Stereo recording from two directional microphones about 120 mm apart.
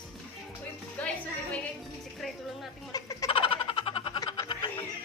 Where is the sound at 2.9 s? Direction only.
30° left (ahead or behind).